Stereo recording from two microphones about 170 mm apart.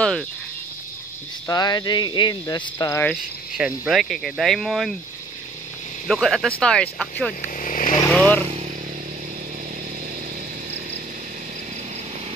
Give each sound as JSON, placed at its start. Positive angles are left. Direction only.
{"t": 1.5, "sound": "speech", "side_deg": 25}
{"t": 3.0, "sound": "speech", "side_deg": 5}
{"t": 3.5, "sound": "speech", "side_deg": -5}
{"t": 6.0, "sound": "speech", "side_deg": 0}
{"t": 7.4, "sound": "vehicle", "side_deg": 50}
{"t": 8.1, "sound": "speech", "side_deg": 5}